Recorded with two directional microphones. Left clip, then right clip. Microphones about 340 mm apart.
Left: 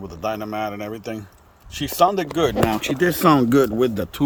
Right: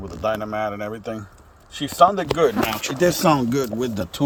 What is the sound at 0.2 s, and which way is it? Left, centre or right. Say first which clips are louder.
A man's voice: right 2 dB; left.